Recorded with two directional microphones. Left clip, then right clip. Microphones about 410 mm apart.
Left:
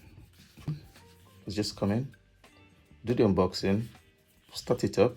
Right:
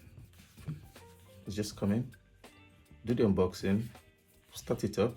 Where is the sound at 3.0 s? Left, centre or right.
Centre.